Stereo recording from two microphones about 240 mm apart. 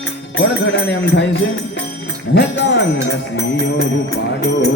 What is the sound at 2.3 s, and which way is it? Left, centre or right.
Music, left.